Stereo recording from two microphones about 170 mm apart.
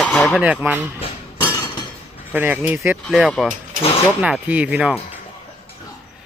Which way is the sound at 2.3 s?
10° right (ahead or behind).